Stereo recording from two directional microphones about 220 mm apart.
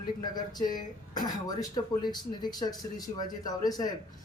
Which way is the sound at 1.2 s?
20° left (ahead or behind).